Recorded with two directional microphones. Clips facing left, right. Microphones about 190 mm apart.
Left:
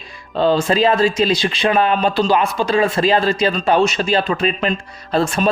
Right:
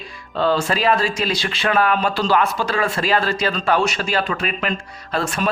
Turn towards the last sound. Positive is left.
turn(degrees=25)  # may be behind; listen again after turning